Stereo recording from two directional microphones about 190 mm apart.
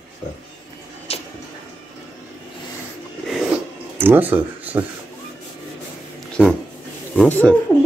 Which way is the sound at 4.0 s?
10° right (ahead or behind).